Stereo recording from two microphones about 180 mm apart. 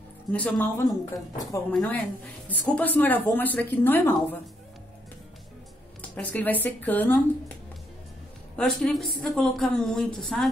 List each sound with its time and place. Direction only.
0.3 s speech: 10° left (ahead or behind)
5.9 s speech: 10° left (ahead or behind)
8.5 s a woman's voice: centre (ahead or behind)